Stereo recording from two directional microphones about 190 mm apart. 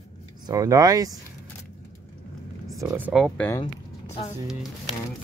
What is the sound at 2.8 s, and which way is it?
Speech, 5° right (ahead or behind).